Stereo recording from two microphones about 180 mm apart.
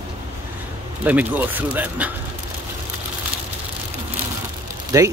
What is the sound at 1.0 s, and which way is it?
Speech, 10° right (ahead or behind).